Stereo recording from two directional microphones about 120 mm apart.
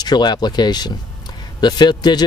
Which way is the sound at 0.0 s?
35° left (ahead or behind).